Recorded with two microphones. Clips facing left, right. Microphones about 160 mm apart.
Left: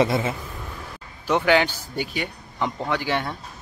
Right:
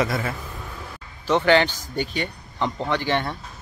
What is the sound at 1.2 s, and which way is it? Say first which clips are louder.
Speech: right 1 dB; 10° left (ahead or behind).